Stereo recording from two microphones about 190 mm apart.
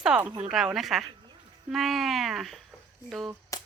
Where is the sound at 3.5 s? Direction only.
15° left (ahead or behind).